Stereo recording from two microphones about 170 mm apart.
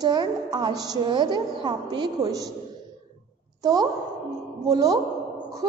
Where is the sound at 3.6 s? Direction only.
20° right (ahead or behind).